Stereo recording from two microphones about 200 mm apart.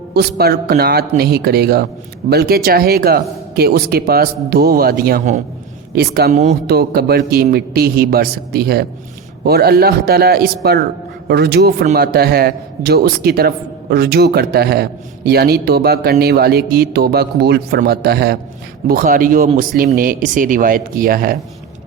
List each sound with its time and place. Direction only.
0.1 s a man's voice: 55° right (ahead or behind)